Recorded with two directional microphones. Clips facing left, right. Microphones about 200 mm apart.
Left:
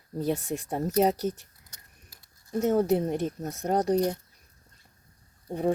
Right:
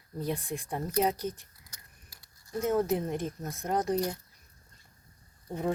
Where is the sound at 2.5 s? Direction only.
40° left (ahead or behind).